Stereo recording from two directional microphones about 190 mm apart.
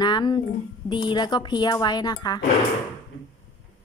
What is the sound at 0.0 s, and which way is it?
A woman's voice, 25° left (ahead or behind).